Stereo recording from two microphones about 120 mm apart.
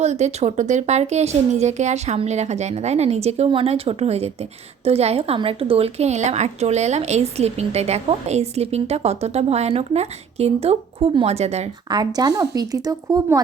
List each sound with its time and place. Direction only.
0.0 s a woman's voice: 70° right (ahead or behind)
11.9 s speech: 35° right (ahead or behind)